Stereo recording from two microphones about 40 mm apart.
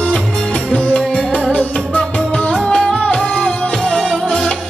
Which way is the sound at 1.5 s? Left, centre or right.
Left.